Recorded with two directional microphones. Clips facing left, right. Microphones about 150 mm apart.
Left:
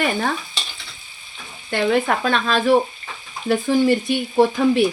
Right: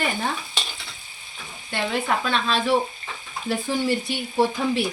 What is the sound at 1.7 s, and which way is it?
Frying, 55° left (ahead or behind).